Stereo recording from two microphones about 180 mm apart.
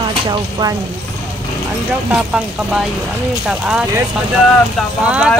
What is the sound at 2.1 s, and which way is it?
Speech, 5° right (ahead or behind).